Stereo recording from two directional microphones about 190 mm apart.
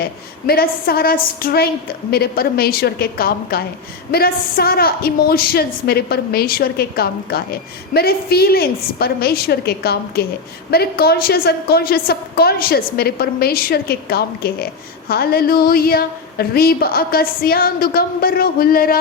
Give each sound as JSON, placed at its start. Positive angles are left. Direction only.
{"t": 0.0, "sound": "a woman's voice", "side_deg": 55}